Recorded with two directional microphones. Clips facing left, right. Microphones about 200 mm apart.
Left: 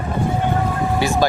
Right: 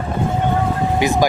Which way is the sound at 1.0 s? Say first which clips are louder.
Right 2 dB; 15° right (ahead or behind).